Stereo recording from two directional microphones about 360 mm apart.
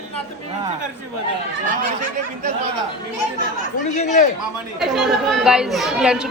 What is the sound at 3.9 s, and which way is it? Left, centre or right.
Speech, centre.